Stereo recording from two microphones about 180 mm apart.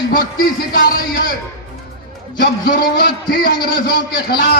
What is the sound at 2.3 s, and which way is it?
A man's voice, 50° left (ahead or behind).